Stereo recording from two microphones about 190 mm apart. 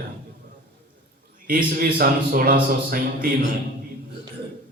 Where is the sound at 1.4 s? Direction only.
50° right (ahead or behind).